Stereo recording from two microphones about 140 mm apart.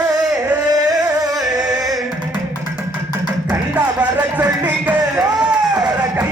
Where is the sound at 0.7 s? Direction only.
25° right (ahead or behind).